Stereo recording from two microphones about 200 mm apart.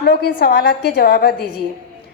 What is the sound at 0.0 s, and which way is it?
A woman's voice, 50° left (ahead or behind).